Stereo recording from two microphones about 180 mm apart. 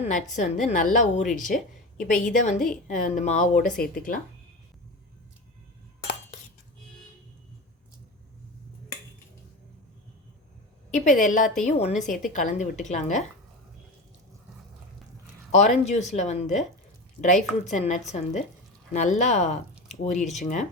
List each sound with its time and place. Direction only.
0.0 s a woman's voice: 45° left (ahead or behind)
10.9 s a woman's voice: 45° left (ahead or behind)
15.5 s speech: 40° left (ahead or behind)
17.7 s speech: 40° left (ahead or behind)